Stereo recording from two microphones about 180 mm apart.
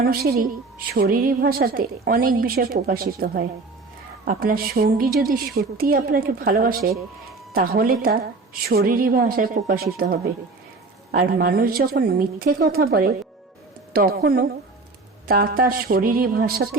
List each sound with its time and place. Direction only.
0.0 s a woman's voice: 55° right (ahead or behind)